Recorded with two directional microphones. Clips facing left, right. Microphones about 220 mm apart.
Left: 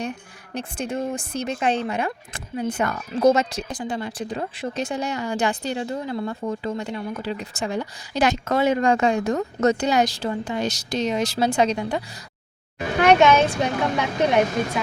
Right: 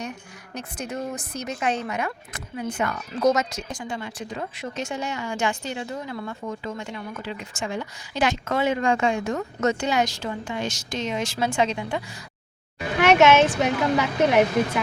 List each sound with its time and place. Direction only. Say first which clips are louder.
0.5 s speech: left 4 dB; 30° left (ahead or behind)
13.0 s a woman's voice: even; centre (ahead or behind)